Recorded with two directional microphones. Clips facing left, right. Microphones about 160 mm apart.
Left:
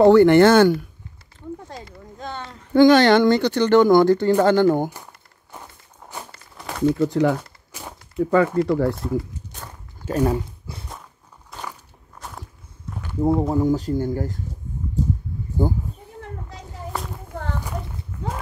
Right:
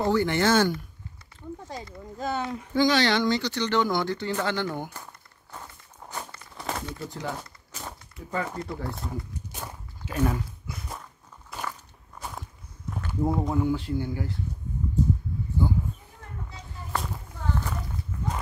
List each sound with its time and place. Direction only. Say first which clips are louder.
0.0 s speech: left 12 dB; 65° left (ahead or behind)
1.7 s speech: even; centre (ahead or behind)
2.7 s speech: left 10 dB; 55° left (ahead or behind)
6.0 s a sound: left 1 dB; 5° left (ahead or behind)
6.9 s speech: left 15 dB; 80° left
8.5 s speech: left 14 dB; 90° left
9.5 s walk: right 1 dB; 10° right (ahead or behind)
10.0 s speech: left 6 dB; 35° left (ahead or behind)
11.5 s walk: even; centre (ahead or behind)
12.2 s whip: even; centre (ahead or behind)
12.9 s a sound: left 1 dB; centre (ahead or behind)
13.4 s speech: left 6 dB; 35° left (ahead or behind)
15.6 s speech: left 5 dB; 45° left (ahead or behind)
16.9 s walk: even; centre (ahead or behind)